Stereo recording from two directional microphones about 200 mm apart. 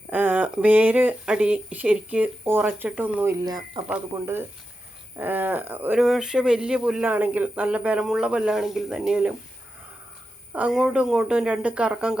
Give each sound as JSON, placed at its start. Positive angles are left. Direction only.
{"t": 0.1, "sound": "speech", "side_deg": -10}
{"t": 3.4, "sound": "speech", "side_deg": -20}
{"t": 3.8, "sound": "speech", "side_deg": -10}
{"t": 10.5, "sound": "speech", "side_deg": -5}